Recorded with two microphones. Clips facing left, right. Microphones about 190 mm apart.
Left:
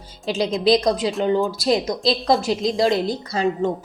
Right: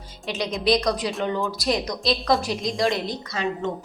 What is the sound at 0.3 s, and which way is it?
A woman's voice, 30° left (ahead or behind).